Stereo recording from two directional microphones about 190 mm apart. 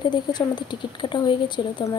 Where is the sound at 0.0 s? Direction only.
20° left (ahead or behind).